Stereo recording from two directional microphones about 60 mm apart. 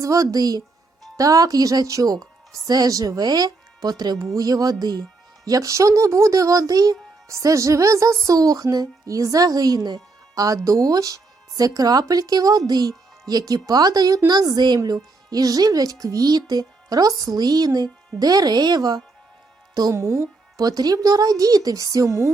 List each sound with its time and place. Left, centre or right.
0.0 s speech: right
5.5 s speech: right
7.3 s speech: right
10.3 s speech: right
19.9 s speech: right
20.6 s speech: right